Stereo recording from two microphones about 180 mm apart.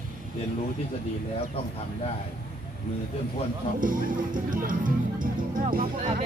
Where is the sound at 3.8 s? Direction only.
50° right (ahead or behind).